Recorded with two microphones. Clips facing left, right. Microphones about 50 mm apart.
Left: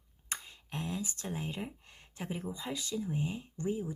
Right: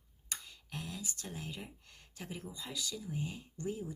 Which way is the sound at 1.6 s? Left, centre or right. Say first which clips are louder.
Left 8 dB; left.